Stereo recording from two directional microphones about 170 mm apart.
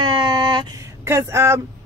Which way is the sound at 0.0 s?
30° right (ahead or behind).